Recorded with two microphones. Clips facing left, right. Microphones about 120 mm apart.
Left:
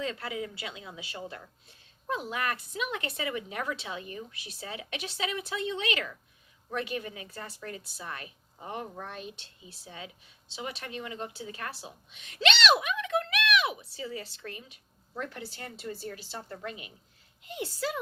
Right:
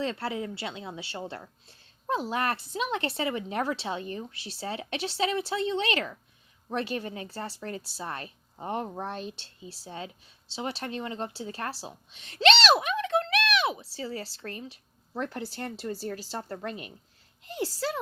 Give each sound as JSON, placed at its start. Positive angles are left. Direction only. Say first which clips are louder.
{"t": 0.0, "sound": "a woman's voice", "louder": "right 3 dB", "side_deg": -30}